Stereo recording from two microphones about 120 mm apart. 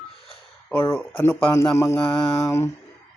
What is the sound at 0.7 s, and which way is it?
Speech, 20° left (ahead or behind).